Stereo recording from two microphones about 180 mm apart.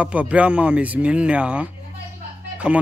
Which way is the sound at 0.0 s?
5° right (ahead or behind).